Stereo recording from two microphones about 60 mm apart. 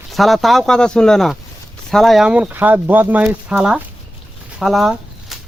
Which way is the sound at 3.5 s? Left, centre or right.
Centre.